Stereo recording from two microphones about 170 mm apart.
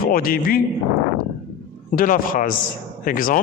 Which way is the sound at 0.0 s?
60° left (ahead or behind).